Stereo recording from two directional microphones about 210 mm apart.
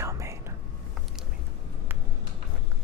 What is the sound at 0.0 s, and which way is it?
Whispering, 15° right (ahead or behind).